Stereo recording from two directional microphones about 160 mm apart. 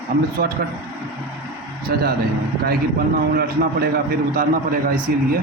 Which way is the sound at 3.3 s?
75° right (ahead or behind).